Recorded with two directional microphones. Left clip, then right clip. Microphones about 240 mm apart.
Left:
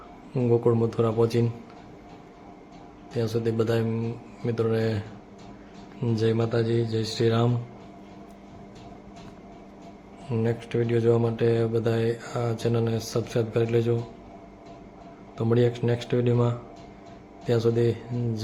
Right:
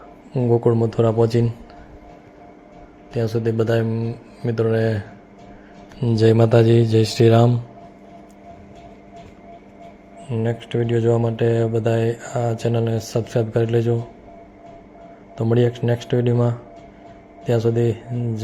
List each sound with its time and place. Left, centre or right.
0.3 s speech: centre
3.1 s speech: centre
10.3 s speech: centre
15.4 s speech: centre